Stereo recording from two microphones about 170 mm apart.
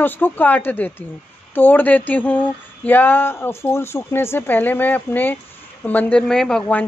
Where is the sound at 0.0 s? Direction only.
10° left (ahead or behind).